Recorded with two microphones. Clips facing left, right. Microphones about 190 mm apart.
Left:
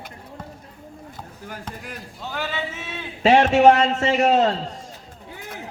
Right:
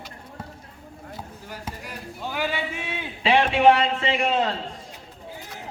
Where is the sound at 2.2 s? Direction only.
10° right (ahead or behind).